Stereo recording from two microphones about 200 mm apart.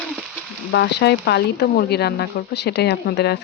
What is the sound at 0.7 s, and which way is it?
Speech, 60° left (ahead or behind).